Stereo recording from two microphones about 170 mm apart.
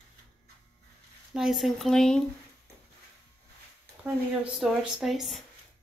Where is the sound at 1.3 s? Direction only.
Centre (ahead or behind).